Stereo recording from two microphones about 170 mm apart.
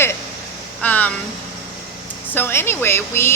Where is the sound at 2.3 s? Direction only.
15° left (ahead or behind).